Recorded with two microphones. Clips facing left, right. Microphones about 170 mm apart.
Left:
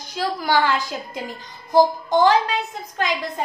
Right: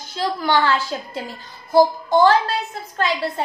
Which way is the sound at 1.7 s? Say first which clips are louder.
Right 1 dB; 20° left (ahead or behind).